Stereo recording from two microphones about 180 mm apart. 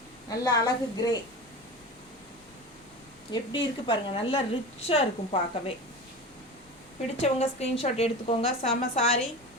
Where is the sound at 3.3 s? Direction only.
25° left (ahead or behind).